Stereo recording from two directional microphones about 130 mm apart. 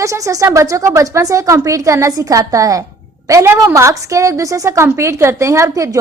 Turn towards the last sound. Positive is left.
turn(degrees=-25)  # may be behind; listen again after turning